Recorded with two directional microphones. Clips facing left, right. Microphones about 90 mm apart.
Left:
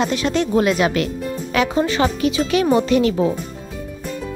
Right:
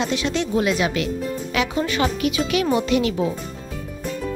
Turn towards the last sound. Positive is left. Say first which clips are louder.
# left 4 dB
turn(degrees=40)  # may be behind; listen again after turning